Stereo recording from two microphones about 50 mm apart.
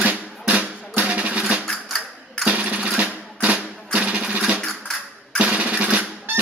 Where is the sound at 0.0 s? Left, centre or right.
Right.